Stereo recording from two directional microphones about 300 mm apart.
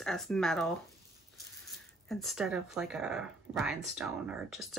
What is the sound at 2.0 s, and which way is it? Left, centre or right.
Speech, centre.